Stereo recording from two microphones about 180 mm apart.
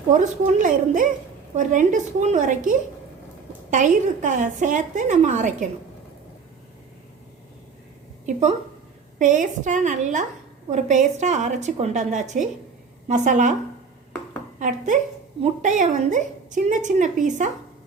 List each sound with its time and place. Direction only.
0.1 s a woman's voice: 45° right (ahead or behind)
9.1 s a woman's voice: 45° right (ahead or behind)
15.4 s a woman's voice: 40° right (ahead or behind)